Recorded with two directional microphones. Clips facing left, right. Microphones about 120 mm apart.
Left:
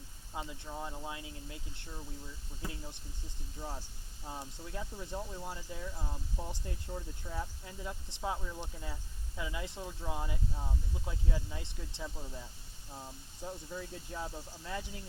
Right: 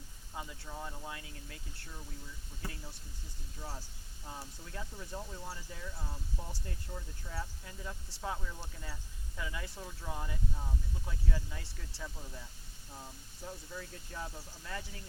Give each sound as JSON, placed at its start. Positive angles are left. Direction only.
{"t": 0.3, "sound": "speech", "side_deg": 20}
{"t": 3.6, "sound": "speech", "side_deg": 15}